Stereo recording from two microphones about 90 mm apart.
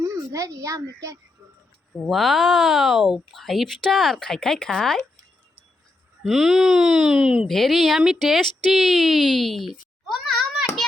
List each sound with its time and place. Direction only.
0.0 s a child's voice: 40° right (ahead or behind)
2.0 s speech: centre (ahead or behind)
6.2 s speech: centre (ahead or behind)